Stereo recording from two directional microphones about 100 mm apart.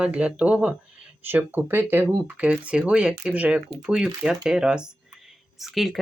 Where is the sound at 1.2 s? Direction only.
20° right (ahead or behind).